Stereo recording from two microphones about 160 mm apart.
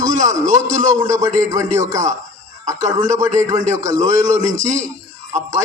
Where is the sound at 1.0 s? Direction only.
20° right (ahead or behind).